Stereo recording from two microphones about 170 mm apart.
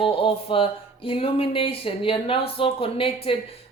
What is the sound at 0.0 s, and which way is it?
Speech, 30° left (ahead or behind).